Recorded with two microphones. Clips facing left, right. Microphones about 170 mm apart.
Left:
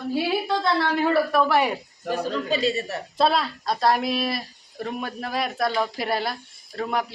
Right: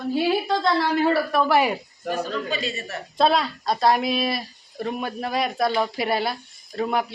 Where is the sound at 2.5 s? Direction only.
35° left (ahead or behind).